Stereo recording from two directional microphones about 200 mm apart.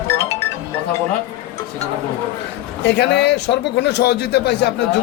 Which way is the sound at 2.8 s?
60° left (ahead or behind).